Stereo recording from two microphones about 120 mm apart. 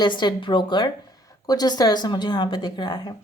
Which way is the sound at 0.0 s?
40° left (ahead or behind).